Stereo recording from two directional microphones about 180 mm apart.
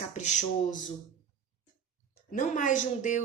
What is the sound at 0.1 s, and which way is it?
Speech, 40° left (ahead or behind).